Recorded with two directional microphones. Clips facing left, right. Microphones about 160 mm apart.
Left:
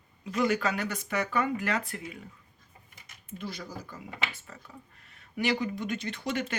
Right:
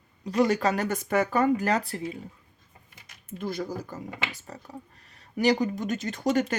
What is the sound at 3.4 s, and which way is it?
Speech, 50° right (ahead or behind).